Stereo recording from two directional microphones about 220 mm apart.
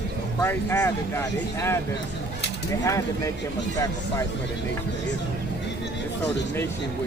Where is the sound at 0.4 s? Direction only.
10° left (ahead or behind).